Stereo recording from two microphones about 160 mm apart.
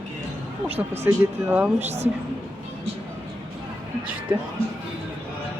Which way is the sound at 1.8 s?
45° right (ahead or behind).